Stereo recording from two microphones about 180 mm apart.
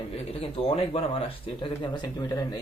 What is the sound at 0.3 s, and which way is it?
Speech, 30° left (ahead or behind).